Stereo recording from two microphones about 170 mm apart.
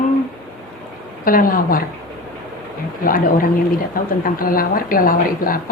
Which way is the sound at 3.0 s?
55° left (ahead or behind).